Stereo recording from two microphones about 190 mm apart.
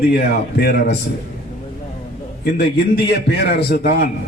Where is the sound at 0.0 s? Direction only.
55° left (ahead or behind).